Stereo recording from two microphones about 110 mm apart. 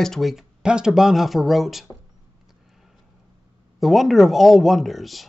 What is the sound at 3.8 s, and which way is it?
Speech, centre (ahead or behind).